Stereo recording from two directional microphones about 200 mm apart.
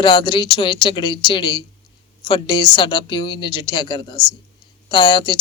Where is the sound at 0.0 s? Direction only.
25° left (ahead or behind).